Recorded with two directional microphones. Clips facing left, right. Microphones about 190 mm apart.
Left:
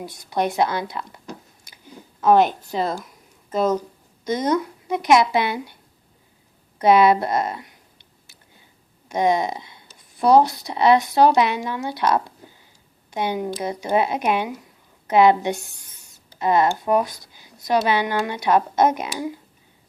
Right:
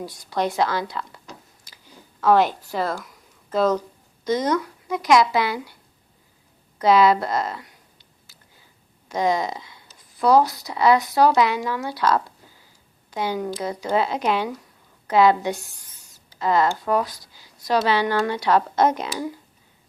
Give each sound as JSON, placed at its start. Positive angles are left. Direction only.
{"t": 0.0, "sound": "speech", "side_deg": 20}
{"t": 2.2, "sound": "speech", "side_deg": 20}
{"t": 6.7, "sound": "speech", "side_deg": 25}
{"t": 9.0, "sound": "speech", "side_deg": 25}
{"t": 12.4, "sound": "a sound", "side_deg": 20}
{"t": 13.1, "sound": "speech", "side_deg": 20}